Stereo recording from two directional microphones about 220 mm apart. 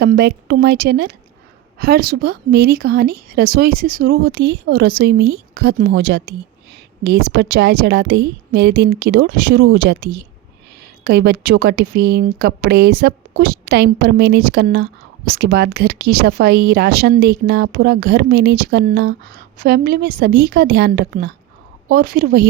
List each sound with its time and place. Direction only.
0.0 s speech: 45° right (ahead or behind)